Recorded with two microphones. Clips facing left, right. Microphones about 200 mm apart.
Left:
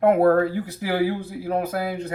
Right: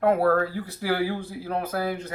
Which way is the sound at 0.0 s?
25° left (ahead or behind).